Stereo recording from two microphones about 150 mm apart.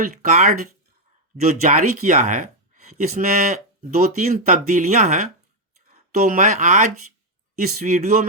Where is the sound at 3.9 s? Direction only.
70° right (ahead or behind).